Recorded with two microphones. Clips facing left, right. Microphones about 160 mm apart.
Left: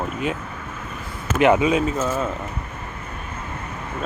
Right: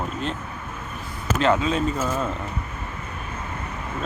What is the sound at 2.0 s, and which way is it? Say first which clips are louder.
Speech: left 2 dB; 5° left (ahead or behind).